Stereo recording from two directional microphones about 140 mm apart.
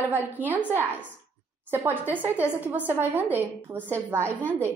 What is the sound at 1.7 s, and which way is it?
A woman's voice, 15° right (ahead or behind).